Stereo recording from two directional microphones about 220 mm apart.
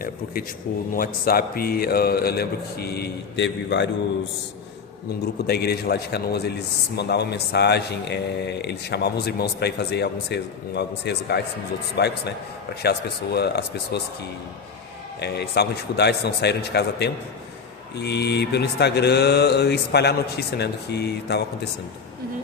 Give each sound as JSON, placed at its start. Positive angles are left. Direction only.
{"t": 0.9, "sound": "speech", "side_deg": 40}
{"t": 5.5, "sound": "speech", "side_deg": 45}
{"t": 15.2, "sound": "speech", "side_deg": 50}